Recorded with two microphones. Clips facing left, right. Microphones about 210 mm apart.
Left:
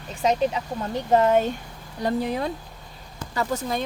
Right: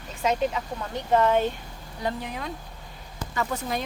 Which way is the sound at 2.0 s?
35° left (ahead or behind).